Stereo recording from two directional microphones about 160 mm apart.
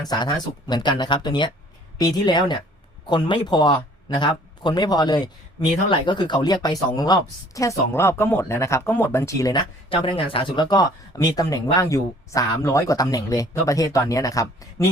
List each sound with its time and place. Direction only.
0.1 s speech: 25° left (ahead or behind)